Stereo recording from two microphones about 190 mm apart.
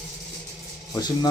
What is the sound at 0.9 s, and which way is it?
Speech, 20° left (ahead or behind).